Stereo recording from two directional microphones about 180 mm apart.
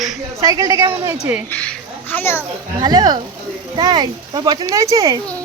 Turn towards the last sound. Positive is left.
turn(degrees=-20)  # may be behind; listen again after turning